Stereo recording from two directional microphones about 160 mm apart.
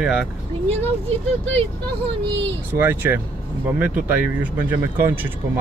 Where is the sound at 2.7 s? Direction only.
15° right (ahead or behind).